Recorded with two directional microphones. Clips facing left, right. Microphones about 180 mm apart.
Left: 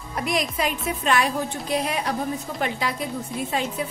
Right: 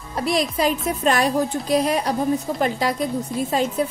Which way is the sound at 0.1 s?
35° right (ahead or behind).